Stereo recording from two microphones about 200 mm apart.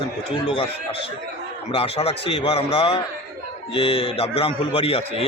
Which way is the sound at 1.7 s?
30° left (ahead or behind).